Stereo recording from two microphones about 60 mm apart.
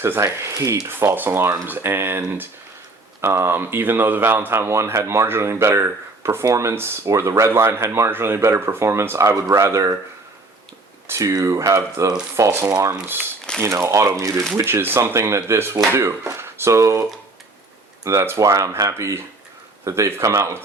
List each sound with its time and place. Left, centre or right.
0.0 s speech: right
0.9 s speech: right
6.7 s speech: right
7.1 s speech: right
11.2 s speech: right
14.6 s speech: right
15.1 s speech: right